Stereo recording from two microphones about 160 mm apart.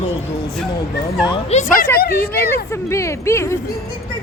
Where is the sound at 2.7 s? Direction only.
15° left (ahead or behind).